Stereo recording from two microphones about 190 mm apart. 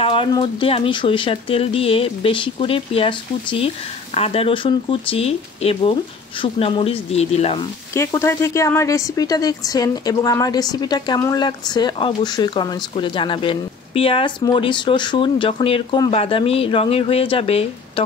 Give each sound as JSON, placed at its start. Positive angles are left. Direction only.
{"t": 0.0, "sound": "a woman's voice", "side_deg": 25}
{"t": 7.9, "sound": "a woman's voice", "side_deg": 15}